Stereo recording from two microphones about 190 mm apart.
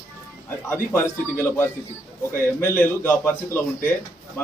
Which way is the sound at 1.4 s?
10° left (ahead or behind).